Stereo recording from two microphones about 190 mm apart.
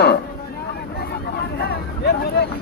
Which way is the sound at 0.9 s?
55° left (ahead or behind).